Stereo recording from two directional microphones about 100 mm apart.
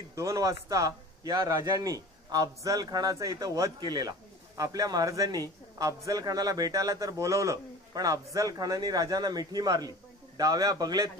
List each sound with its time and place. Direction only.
0.1 s a man's voice: 30° right (ahead or behind)
1.3 s a man's voice: 50° right (ahead or behind)
1.6 s speech: 35° right (ahead or behind)